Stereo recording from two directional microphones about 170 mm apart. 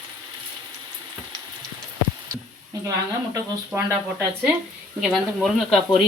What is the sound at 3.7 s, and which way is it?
Speech, 15° right (ahead or behind).